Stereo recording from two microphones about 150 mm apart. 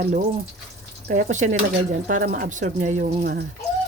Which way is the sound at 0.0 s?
50° right (ahead or behind).